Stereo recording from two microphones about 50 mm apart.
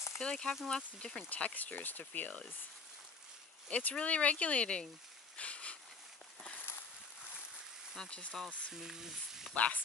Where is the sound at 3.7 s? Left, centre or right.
Left.